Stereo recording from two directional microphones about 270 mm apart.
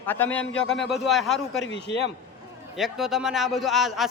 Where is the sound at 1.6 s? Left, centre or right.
Left.